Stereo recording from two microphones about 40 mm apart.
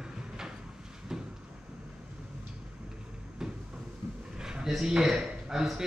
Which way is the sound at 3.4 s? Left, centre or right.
Centre.